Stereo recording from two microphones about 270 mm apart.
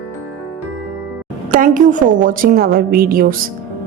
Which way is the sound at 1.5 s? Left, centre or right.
Right.